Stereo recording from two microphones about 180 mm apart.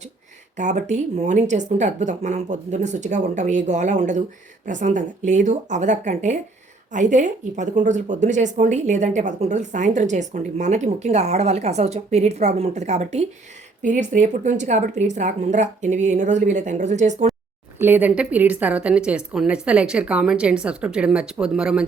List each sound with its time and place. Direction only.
0.5 s speech: 40° right (ahead or behind)
17.7 s speech: 10° right (ahead or behind)